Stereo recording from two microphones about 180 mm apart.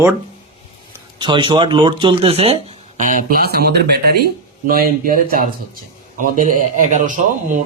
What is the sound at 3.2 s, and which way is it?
Speech, 55° right (ahead or behind).